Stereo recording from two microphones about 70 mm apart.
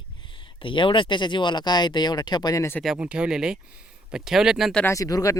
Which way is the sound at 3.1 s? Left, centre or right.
Centre.